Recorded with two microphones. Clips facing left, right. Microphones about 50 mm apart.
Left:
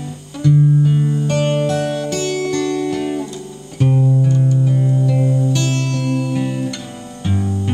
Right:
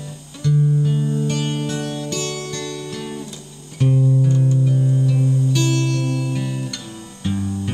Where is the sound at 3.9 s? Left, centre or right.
Left.